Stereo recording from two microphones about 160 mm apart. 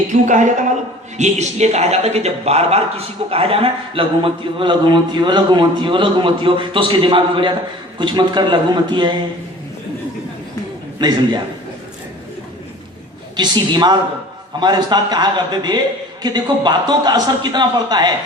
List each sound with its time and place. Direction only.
0.1 s a woman's voice: 50° right (ahead or behind); by 9.1 s 30° right (ahead or behind)
11.0 s a man's voice: 30° right (ahead or behind)
13.3 s a man's voice: 25° right (ahead or behind)